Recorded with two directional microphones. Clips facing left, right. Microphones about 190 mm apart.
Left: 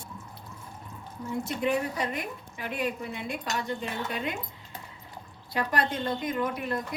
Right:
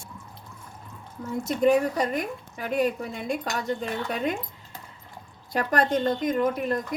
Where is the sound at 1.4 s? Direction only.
45° right (ahead or behind).